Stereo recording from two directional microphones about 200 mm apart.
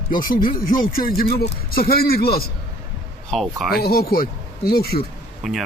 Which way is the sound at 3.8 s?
50° left (ahead or behind).